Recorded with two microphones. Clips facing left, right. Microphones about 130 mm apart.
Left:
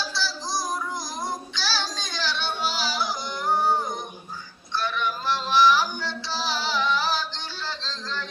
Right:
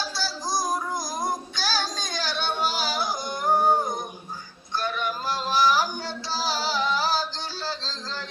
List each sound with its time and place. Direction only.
0.1 s child singing: 45° right (ahead or behind)
4.7 s music: 45° right (ahead or behind)